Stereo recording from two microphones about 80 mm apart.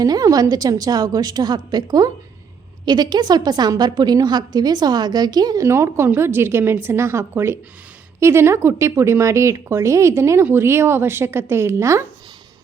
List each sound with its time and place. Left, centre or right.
0.0 s a woman's voice: right
5.6 s speech: right